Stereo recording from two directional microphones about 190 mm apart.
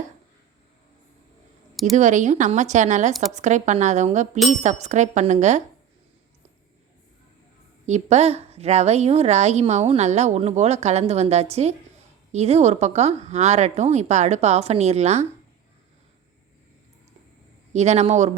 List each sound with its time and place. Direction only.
2.0 s a woman's voice: 40° right (ahead or behind)
7.9 s a woman's voice: 35° right (ahead or behind)
17.7 s a woman's voice: 35° right (ahead or behind)